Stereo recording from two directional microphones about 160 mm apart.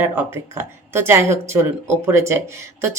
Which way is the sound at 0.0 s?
15° right (ahead or behind).